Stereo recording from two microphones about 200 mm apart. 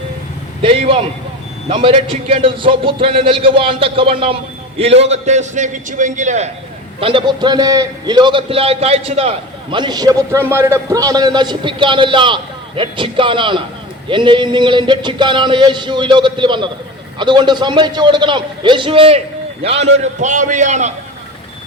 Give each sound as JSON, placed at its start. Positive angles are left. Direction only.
{"t": 0.6, "sound": "a man's voice", "side_deg": -25}
{"t": 7.0, "sound": "a man's voice", "side_deg": -25}